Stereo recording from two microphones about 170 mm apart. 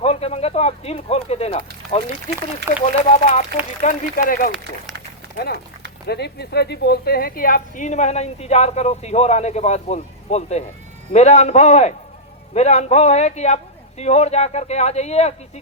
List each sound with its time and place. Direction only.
0.0 s a woman's voice: 35° left (ahead or behind)
3.8 s speech: 55° left (ahead or behind)
6.1 s a woman's voice: 75° left (ahead or behind); by 15.4 s 40° left (ahead or behind)